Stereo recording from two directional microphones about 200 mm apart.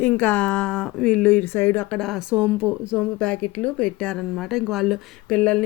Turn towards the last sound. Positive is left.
turn(degrees=5)  # may be behind; listen again after turning